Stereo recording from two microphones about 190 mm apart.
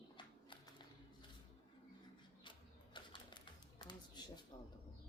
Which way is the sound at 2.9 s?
25° left (ahead or behind).